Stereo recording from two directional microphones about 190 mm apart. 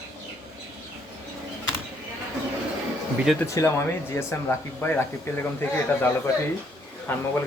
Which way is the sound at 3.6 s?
15° left (ahead or behind).